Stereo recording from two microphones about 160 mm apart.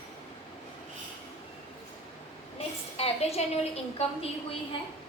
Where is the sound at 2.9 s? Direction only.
40° left (ahead or behind).